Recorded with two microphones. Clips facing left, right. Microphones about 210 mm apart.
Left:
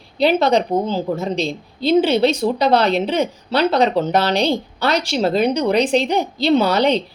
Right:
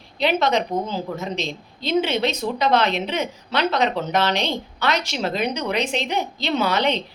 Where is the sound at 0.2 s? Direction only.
35° left (ahead or behind).